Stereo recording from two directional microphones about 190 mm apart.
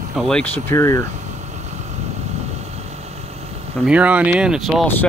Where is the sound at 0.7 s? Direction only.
15° left (ahead or behind).